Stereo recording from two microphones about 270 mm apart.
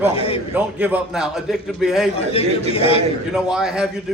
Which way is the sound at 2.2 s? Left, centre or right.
Left.